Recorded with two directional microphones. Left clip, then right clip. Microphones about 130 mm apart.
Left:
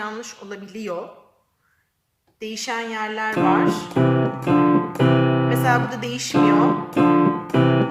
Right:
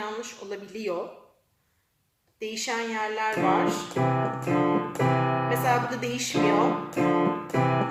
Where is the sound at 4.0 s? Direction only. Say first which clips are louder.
Left 6 dB; 70° left (ahead or behind).